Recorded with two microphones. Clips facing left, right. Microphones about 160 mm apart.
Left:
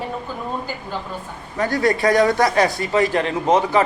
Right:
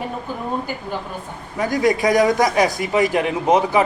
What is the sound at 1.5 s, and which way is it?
A man's voice, 10° right (ahead or behind).